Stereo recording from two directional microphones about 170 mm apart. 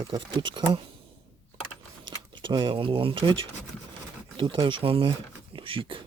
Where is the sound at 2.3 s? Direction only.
30° right (ahead or behind).